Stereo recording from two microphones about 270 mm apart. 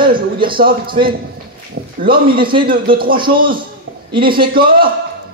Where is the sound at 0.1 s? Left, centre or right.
Centre.